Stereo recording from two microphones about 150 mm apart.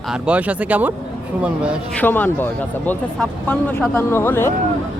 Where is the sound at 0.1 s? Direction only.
10° right (ahead or behind).